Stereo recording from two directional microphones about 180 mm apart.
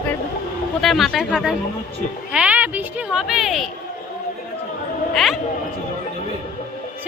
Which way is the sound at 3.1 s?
Centre (ahead or behind).